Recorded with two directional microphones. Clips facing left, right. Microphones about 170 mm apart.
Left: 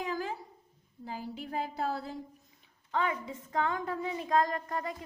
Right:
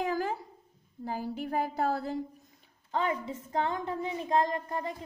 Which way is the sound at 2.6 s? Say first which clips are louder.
Right 1 dB; 35° right (ahead or behind).